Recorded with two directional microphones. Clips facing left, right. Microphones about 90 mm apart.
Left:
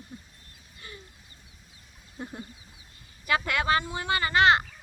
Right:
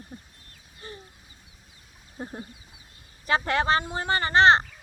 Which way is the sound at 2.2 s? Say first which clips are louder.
Right 2 dB; 35° right (ahead or behind).